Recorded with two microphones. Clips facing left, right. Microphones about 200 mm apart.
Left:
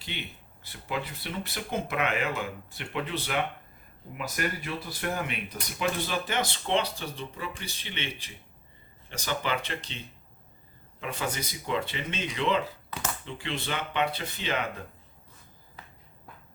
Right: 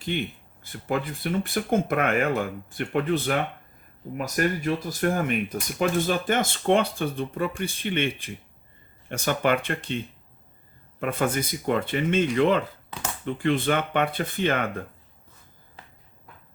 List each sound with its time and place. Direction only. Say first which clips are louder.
0.0 s speech: right 11 dB; 50° right (ahead or behind)
11.0 s speech: right 8 dB; 55° right (ahead or behind)